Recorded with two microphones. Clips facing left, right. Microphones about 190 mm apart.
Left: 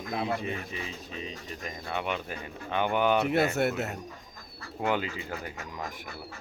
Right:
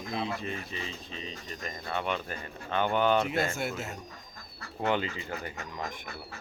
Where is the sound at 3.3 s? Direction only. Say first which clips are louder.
Left 5 dB; 65° left (ahead or behind).